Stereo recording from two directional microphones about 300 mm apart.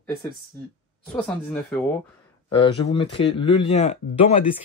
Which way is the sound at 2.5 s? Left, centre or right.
Centre.